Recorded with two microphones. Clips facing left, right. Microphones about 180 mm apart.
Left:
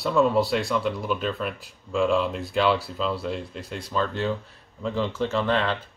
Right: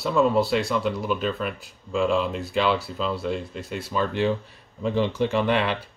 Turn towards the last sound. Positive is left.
turn(degrees=-15)  # may be behind; listen again after turning